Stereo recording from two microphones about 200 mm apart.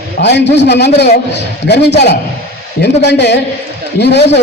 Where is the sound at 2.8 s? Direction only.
60° left (ahead or behind).